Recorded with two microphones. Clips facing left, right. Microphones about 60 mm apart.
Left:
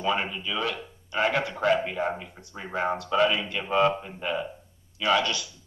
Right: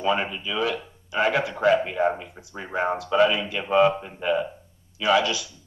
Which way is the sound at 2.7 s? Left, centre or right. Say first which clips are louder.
Right 2 dB; centre.